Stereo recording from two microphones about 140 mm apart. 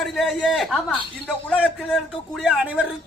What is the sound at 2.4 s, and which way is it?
Speech, 10° right (ahead or behind).